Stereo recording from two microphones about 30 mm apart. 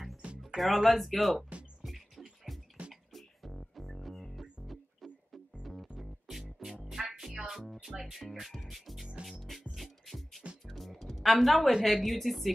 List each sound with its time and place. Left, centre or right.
0.2 s music: right
0.6 s speech: centre
2.5 s music: centre
6.9 s music: centre
8.0 s speech: centre
9.8 s music: centre
11.8 s speech: centre